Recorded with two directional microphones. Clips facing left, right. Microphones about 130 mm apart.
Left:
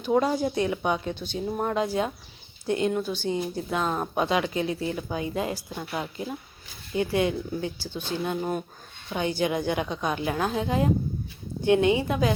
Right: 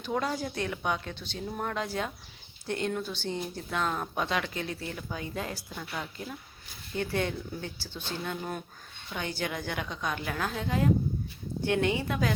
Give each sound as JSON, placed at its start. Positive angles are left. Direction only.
{"t": 0.0, "sound": "speech", "side_deg": 20}
{"t": 6.9, "sound": "speech", "side_deg": 10}